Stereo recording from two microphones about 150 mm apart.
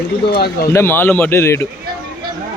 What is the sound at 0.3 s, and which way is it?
Speech, 90° left.